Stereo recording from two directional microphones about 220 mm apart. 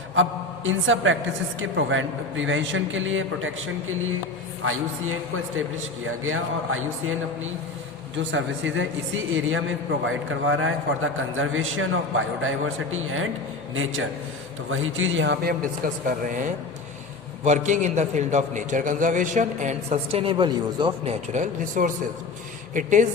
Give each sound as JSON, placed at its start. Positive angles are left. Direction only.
{"t": 0.2, "sound": "a man's voice", "side_deg": -60}
{"t": 6.1, "sound": "a man's voice", "side_deg": -70}
{"t": 8.1, "sound": "a man's voice", "side_deg": -55}
{"t": 14.7, "sound": "a man's voice", "side_deg": -65}